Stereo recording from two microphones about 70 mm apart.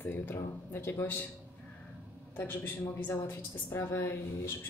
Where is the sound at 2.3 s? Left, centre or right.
Left.